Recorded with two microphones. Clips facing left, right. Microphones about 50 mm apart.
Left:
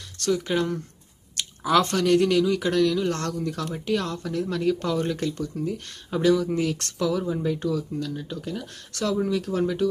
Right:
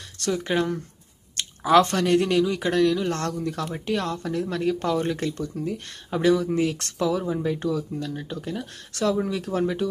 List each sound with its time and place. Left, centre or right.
0.2 s speech: centre
1.8 s speech: centre